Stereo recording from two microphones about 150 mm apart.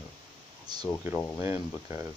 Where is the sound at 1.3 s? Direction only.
15° right (ahead or behind).